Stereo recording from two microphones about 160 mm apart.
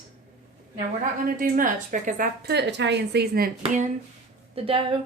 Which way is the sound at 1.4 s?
55° right (ahead or behind).